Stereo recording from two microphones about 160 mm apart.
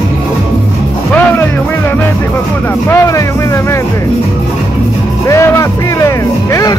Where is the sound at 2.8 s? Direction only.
20° left (ahead or behind).